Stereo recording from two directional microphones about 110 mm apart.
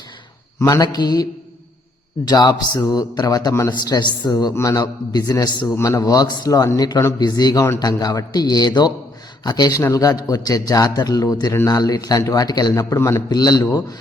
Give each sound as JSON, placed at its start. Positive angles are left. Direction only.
{"t": 0.6, "sound": "a man's voice", "side_deg": 35}
{"t": 5.7, "sound": "speech", "side_deg": 25}
{"t": 6.0, "sound": "a man's voice", "side_deg": 35}
{"t": 13.3, "sound": "a man's voice", "side_deg": 35}